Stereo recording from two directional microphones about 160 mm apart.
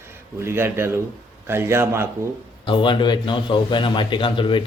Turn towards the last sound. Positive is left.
turn(degrees=30)  # may be behind; listen again after turning